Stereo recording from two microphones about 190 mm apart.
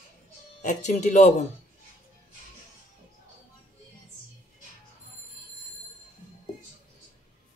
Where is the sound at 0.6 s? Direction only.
40° left (ahead or behind).